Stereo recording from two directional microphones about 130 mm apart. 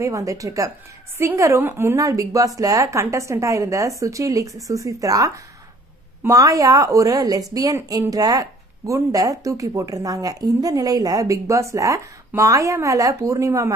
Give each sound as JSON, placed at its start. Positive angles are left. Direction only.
{"t": 0.0, "sound": "speech", "side_deg": -25}